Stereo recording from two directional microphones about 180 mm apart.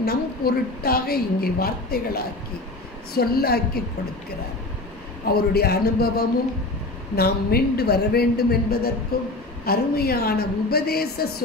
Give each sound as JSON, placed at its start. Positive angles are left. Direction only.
{"t": 0.0, "sound": "a woman's voice", "side_deg": 60}
{"t": 5.3, "sound": "a woman's voice", "side_deg": 60}